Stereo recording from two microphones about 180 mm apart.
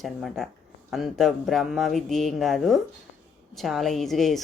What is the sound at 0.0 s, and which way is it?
A woman's voice, centre (ahead or behind).